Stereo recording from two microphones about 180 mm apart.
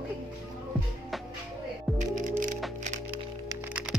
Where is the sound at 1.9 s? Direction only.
45° right (ahead or behind).